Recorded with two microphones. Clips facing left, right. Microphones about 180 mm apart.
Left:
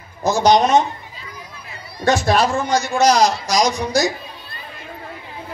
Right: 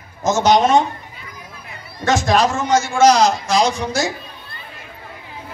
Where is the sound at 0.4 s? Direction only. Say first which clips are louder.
Even; 20° left (ahead or behind).